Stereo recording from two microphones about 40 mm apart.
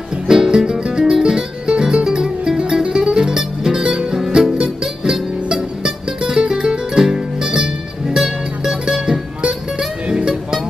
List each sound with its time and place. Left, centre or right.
0.3 s music: centre